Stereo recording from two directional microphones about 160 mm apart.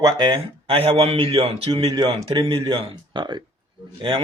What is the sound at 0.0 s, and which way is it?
Speech, 30° right (ahead or behind).